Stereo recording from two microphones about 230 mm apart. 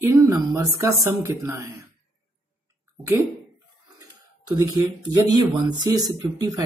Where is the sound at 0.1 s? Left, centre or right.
Centre.